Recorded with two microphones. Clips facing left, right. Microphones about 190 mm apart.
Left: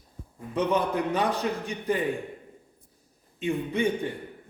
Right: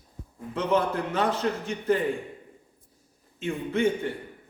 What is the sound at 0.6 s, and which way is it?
A man's voice, 15° left (ahead or behind).